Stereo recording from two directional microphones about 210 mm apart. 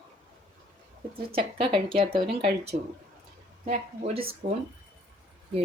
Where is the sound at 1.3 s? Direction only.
25° right (ahead or behind).